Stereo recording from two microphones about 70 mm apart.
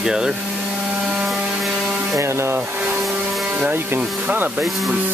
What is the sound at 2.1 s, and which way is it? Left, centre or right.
Speech, right.